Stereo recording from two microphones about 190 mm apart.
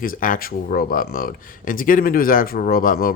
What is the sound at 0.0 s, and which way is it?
Speech, 45° left (ahead or behind).